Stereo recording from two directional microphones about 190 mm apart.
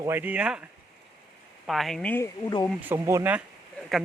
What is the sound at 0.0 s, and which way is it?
Speech, 10° right (ahead or behind).